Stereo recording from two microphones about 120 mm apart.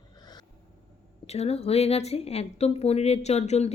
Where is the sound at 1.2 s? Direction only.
60° left (ahead or behind).